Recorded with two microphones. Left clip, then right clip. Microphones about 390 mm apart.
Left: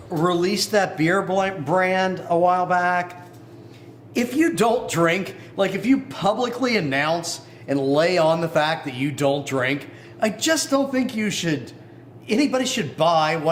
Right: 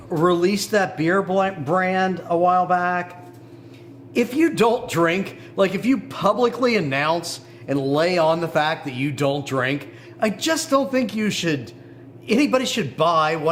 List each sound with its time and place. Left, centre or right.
0.1 s a man's voice: right
4.1 s a man's voice: right